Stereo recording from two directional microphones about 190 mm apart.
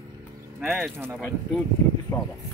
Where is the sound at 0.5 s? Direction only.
Centre (ahead or behind).